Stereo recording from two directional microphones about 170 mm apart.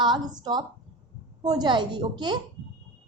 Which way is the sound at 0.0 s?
25° right (ahead or behind).